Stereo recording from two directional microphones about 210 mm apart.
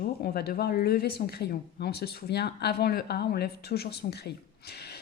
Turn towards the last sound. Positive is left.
turn(degrees=50)  # may be behind; listen again after turning